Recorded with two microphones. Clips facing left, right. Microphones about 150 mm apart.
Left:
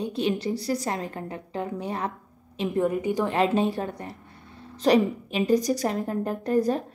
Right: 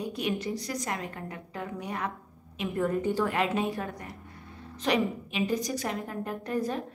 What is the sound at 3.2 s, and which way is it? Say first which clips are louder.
A woman's voice: left 5 dB; 30° left (ahead or behind).